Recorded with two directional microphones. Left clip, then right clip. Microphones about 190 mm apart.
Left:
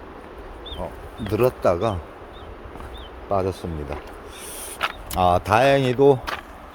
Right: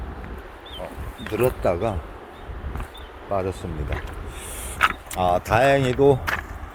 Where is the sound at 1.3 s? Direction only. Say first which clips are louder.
Left 2 dB; 25° left (ahead or behind).